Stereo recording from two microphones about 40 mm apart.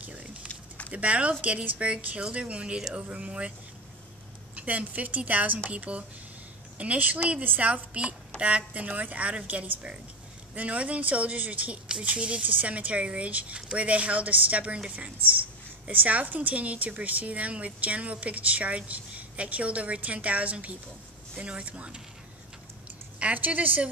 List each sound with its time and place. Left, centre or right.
0.0 s a sound: right
0.5 s a sound: left
0.9 s speech: right
4.6 s a woman's voice: right
12.0 s speech: right
15.9 s speech: right
23.3 s a woman's voice: right